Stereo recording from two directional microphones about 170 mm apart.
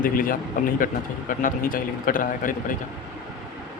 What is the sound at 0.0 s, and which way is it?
A man's voice, 55° left (ahead or behind).